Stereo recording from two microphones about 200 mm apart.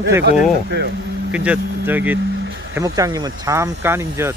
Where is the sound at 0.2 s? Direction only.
55° right (ahead or behind).